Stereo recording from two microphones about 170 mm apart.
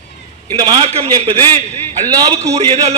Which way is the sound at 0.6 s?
35° right (ahead or behind).